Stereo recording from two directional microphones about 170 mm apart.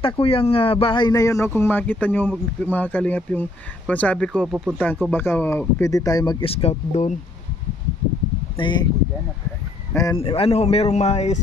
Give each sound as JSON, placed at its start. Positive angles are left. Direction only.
{"t": 0.0, "sound": "speech", "side_deg": 35}
{"t": 6.4, "sound": "speech", "side_deg": 35}
{"t": 8.5, "sound": "speech", "side_deg": 30}
{"t": 10.1, "sound": "speech", "side_deg": 35}